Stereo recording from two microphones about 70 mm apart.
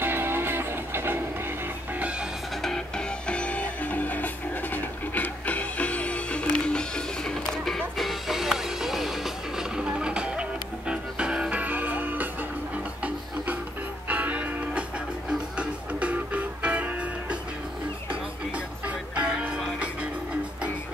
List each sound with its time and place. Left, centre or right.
0.0 s music: right
3.3 s music: centre; by 12.3 s right
14.0 s music: right
19.1 s music: centre